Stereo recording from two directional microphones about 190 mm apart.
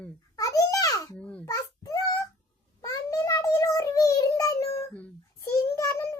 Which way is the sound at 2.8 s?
20° left (ahead or behind).